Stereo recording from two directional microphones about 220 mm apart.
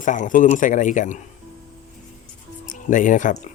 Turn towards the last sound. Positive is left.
turn(degrees=35)  # may be behind; listen again after turning